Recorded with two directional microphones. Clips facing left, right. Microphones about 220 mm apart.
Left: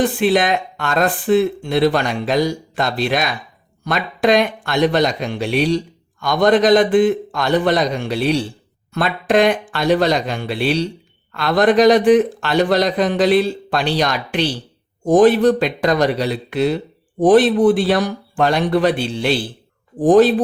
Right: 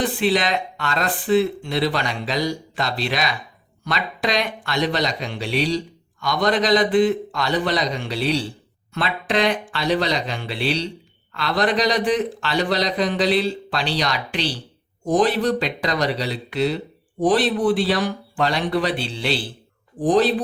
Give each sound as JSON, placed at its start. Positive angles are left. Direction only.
{"t": 0.0, "sound": "speech", "side_deg": 50}